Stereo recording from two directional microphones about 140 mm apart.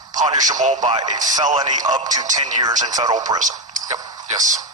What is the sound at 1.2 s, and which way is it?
Speech, 60° right (ahead or behind).